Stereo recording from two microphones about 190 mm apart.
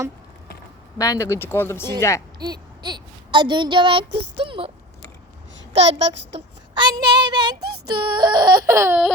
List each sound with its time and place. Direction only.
0.9 s speech: 15° left (ahead or behind)
2.4 s speech: 20° right (ahead or behind)
5.7 s speech: 30° right (ahead or behind)
7.5 s female singing: 55° right (ahead or behind)
7.9 s speech: 25° right (ahead or behind); by 9.1 s 10° right (ahead or behind)